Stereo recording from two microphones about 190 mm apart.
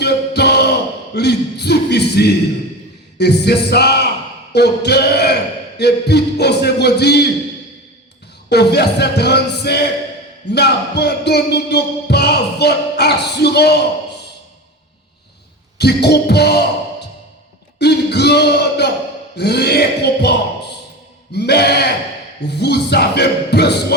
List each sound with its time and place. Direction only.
0.0 s a sound: 60° left (ahead or behind)
1.1 s music: 60° left (ahead or behind)
8.4 s music: 60° left (ahead or behind)
15.8 s speech: 60° left (ahead or behind)
17.7 s a sound: 60° left (ahead or behind)
19.4 s speech: 60° left (ahead or behind)
21.3 s music: 60° left (ahead or behind)